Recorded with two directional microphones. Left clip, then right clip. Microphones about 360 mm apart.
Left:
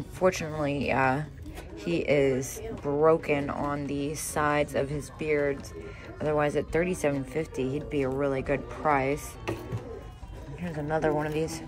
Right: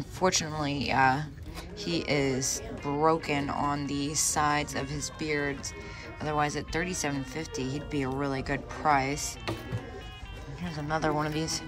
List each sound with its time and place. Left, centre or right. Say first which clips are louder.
0.2 s speech: left 2 dB; centre
10.6 s speech: left 2 dB; centre